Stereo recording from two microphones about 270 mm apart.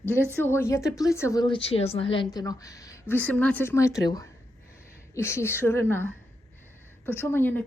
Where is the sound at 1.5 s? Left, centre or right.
Left.